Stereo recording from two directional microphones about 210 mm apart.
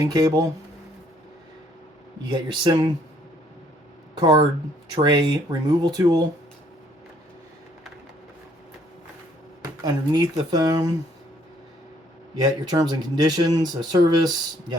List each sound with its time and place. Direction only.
0.0 s speech: 15° right (ahead or behind)
2.3 s speech: 25° right (ahead or behind)
4.2 s speech: 20° right (ahead or behind)
9.8 s speech: 20° right (ahead or behind)
12.4 s speech: 20° right (ahead or behind)